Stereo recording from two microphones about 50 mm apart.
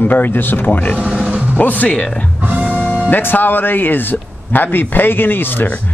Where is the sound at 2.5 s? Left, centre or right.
Right.